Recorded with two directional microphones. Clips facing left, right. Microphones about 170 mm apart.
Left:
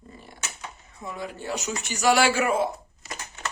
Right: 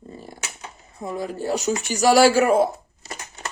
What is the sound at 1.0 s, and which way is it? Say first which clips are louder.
Speech: right 7 dB; 40° right (ahead or behind).